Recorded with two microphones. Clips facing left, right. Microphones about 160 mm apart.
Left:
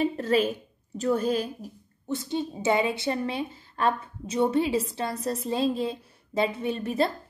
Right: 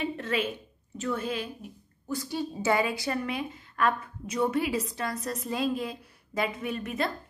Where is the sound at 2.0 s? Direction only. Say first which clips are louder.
Left 3 dB; 25° left (ahead or behind).